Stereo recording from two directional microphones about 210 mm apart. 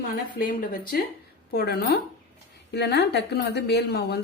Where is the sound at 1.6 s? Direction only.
50° left (ahead or behind).